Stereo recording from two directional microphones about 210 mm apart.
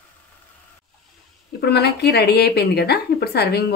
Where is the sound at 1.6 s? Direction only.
50° left (ahead or behind).